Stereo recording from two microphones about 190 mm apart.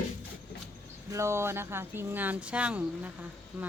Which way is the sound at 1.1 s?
15° right (ahead or behind).